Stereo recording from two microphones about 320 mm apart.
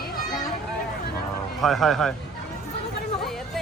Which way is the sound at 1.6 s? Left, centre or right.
Centre.